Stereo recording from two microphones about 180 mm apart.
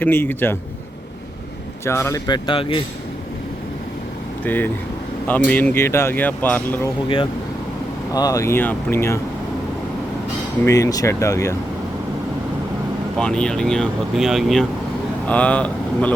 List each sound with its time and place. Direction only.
0.0 s speech: 10° left (ahead or behind)
1.8 s speech: 15° left (ahead or behind)
4.4 s speech: 10° left (ahead or behind)
8.1 s speech: 20° left (ahead or behind)
10.7 s speech: 20° left (ahead or behind)
13.1 s speech: 5° left (ahead or behind)